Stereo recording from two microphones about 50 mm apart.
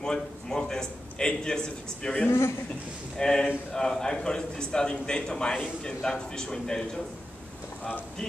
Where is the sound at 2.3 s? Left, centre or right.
Left.